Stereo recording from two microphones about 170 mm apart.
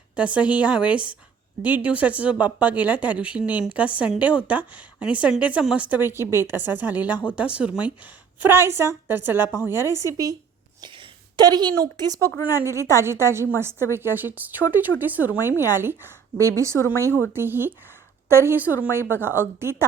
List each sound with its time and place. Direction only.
0.2 s speech: 10° right (ahead or behind)
11.3 s speech: 25° right (ahead or behind)
17.1 s speech: 10° left (ahead or behind)
17.3 s speech: 15° right (ahead or behind)